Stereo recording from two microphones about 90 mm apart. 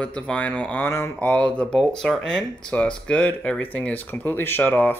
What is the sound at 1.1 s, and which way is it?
Speech, 15° left (ahead or behind).